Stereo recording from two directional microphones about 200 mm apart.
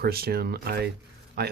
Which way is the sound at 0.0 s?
50° right (ahead or behind).